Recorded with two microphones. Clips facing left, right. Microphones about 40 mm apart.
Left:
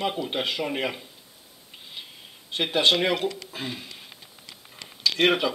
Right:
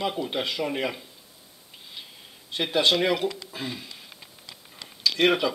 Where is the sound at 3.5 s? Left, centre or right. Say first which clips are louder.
Even; centre.